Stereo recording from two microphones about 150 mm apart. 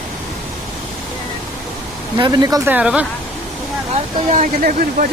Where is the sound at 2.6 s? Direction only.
10° right (ahead or behind).